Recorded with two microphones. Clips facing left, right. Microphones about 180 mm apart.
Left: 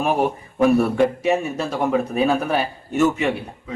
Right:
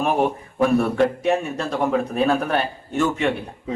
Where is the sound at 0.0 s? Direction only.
5° left (ahead or behind).